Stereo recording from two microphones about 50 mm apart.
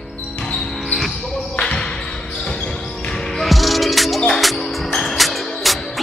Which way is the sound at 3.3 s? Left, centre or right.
Centre.